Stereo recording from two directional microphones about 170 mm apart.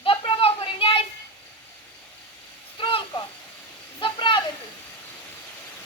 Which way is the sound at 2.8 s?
30° left (ahead or behind).